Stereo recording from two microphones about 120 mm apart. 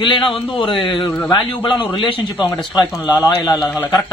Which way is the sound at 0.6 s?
45° left (ahead or behind).